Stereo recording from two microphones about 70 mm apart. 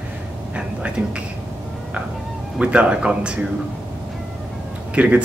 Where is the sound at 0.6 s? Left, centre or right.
Centre.